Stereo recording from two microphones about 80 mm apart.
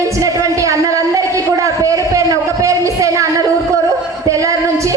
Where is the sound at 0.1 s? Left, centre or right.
Right.